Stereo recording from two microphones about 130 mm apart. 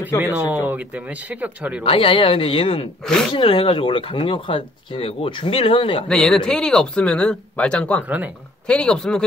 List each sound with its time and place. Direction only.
0.2 s speech: 10° right (ahead or behind)
1.9 s speech: 45° left (ahead or behind)
6.0 s speech: 5° left (ahead or behind)